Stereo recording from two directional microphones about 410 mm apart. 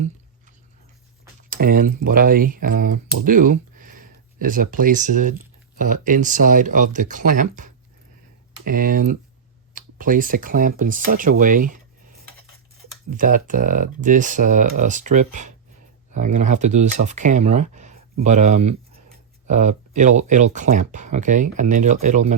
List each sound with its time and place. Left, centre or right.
1.5 s speech: right
13.1 s speech: centre